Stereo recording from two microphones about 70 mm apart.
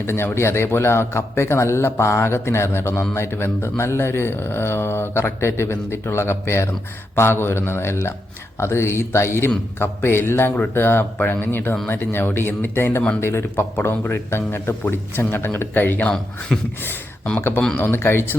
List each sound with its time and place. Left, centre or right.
0.0 s speech: left
17.7 s speech: left